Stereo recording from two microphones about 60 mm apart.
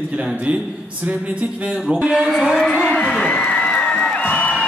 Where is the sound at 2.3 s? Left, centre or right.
Centre.